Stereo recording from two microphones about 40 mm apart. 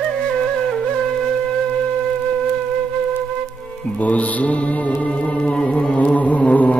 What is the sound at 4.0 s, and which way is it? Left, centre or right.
Music, left.